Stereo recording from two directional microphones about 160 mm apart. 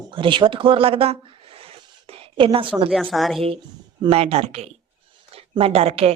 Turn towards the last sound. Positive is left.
turn(degrees=-40)  # may be behind; listen again after turning